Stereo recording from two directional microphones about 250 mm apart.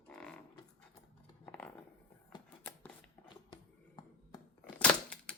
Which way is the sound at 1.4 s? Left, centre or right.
Centre.